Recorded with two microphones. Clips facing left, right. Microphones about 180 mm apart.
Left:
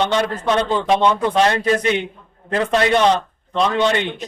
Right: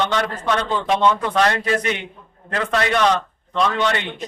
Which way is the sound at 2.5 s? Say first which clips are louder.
Left 4 dB; 25° left (ahead or behind).